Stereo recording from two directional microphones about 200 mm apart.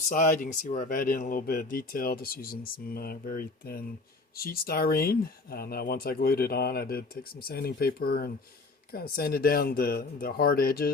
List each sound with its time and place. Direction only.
0.1 s speech: 45° left (ahead or behind)